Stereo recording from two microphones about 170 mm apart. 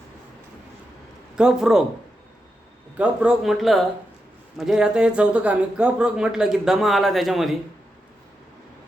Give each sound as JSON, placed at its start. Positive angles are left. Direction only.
{"t": 1.4, "sound": "speech", "side_deg": -5}
{"t": 3.0, "sound": "speech", "side_deg": -5}